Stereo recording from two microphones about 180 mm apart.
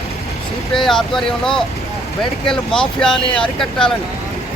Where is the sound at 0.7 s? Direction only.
Centre (ahead or behind).